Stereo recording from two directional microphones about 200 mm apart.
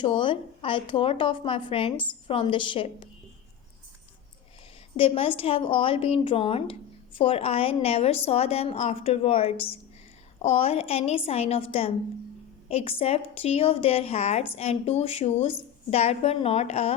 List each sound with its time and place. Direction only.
0.0 s speech: 25° left (ahead or behind)
4.9 s a woman's voice: 30° left (ahead or behind)